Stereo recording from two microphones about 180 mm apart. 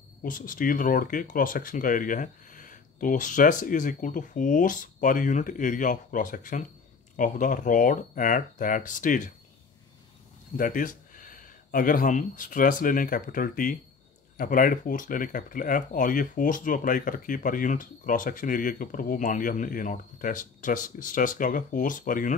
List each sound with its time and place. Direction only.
0.2 s speech: 50° left (ahead or behind)
10.6 s speech: 50° left (ahead or behind)